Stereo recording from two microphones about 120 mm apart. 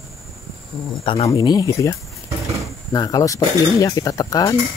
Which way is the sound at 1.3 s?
35° left (ahead or behind).